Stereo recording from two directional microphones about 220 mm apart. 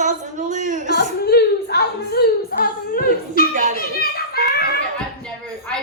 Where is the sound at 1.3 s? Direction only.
45° left (ahead or behind).